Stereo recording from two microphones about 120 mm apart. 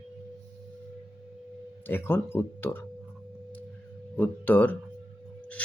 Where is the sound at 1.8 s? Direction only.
20° left (ahead or behind).